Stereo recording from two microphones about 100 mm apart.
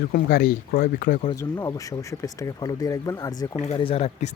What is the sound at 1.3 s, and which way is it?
Speech, 30° left (ahead or behind).